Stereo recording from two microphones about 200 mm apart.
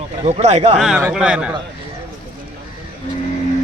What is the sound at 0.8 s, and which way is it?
Speech, 5° right (ahead or behind).